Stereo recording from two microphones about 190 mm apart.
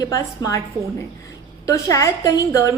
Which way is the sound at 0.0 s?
20° left (ahead or behind).